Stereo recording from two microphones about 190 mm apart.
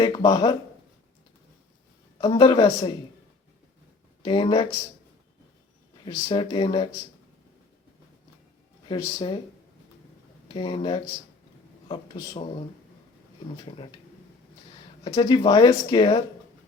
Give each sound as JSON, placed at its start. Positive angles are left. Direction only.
{"t": 0.0, "sound": "speech", "side_deg": 25}
{"t": 2.2, "sound": "speech", "side_deg": 25}
{"t": 4.2, "sound": "speech", "side_deg": 25}
{"t": 6.1, "sound": "speech", "side_deg": 25}
{"t": 8.9, "sound": "speech", "side_deg": 25}
{"t": 10.5, "sound": "speech", "side_deg": 25}
{"t": 13.7, "sound": "speech", "side_deg": 25}
{"t": 15.0, "sound": "speech", "side_deg": 25}